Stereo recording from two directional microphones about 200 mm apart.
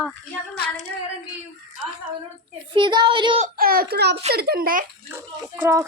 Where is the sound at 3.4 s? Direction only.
50° right (ahead or behind).